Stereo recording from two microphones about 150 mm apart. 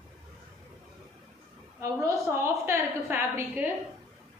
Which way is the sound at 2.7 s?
15° right (ahead or behind).